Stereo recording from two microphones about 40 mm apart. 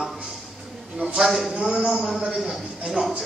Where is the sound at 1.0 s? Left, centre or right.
Right.